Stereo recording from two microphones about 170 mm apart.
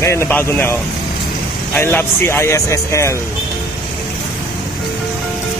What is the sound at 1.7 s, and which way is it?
Speech, 15° left (ahead or behind).